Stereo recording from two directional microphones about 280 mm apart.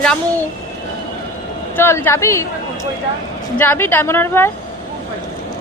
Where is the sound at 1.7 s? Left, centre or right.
Centre.